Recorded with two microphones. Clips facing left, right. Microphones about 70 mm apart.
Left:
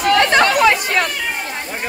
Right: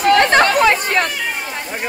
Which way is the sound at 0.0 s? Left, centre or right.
Right.